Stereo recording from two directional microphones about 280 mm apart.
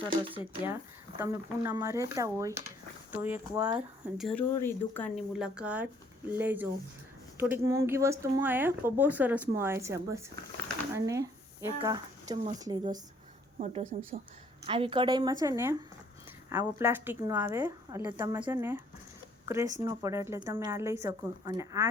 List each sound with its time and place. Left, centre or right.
0.1 s speech: centre
13.9 s speech: right